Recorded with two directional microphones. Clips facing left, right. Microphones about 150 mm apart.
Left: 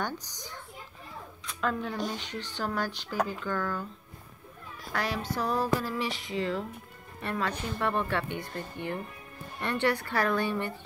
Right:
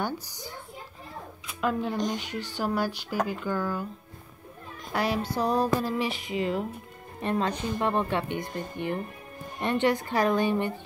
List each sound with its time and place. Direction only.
0.0 s speech: 10° right (ahead or behind)
4.9 s speech: 15° right (ahead or behind)